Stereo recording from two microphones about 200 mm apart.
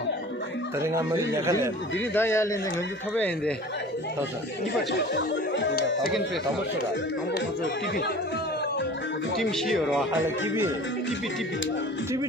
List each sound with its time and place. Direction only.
0.7 s speech: 15° right (ahead or behind)
2.1 s speech: 15° left (ahead or behind)
4.9 s speech: 65° left (ahead or behind)
9.4 s speech: centre (ahead or behind)
10.2 s speech: 10° right (ahead or behind)